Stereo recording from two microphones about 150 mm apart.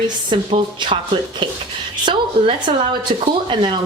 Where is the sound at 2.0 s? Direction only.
35° right (ahead or behind).